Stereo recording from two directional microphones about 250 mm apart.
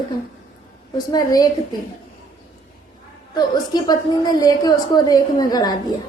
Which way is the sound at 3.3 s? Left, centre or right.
Centre.